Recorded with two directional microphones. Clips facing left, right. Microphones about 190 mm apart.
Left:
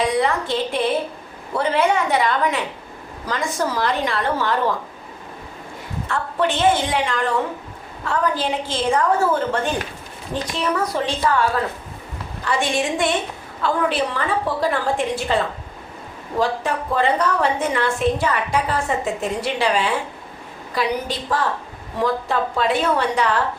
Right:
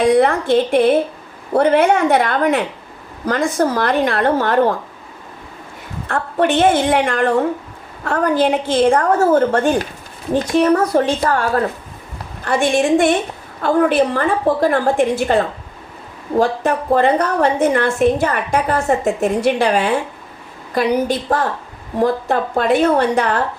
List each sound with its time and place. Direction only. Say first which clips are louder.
0.1 s a woman's voice: right 7 dB; 55° right (ahead or behind)
6.1 s a woman's voice: right 5 dB; 55° right (ahead or behind)